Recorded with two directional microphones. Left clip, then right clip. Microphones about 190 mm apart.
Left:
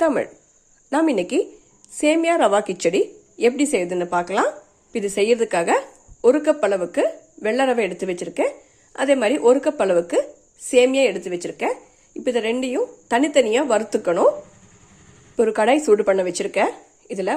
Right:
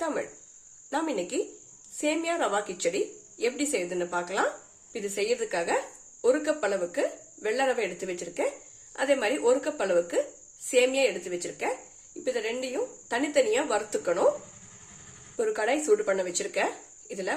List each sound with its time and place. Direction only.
0.0 s speech: 40° left (ahead or behind)
15.4 s speech: 35° left (ahead or behind)